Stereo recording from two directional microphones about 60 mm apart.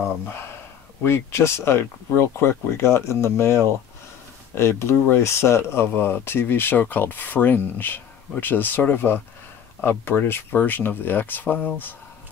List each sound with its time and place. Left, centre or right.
1.0 s speech: left